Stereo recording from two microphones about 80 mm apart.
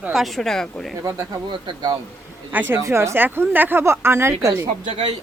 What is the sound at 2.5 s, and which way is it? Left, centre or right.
Speech, right.